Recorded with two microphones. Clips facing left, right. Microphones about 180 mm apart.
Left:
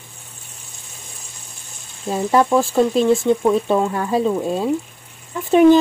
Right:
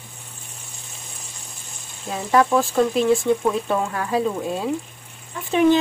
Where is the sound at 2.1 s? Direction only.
25° left (ahead or behind).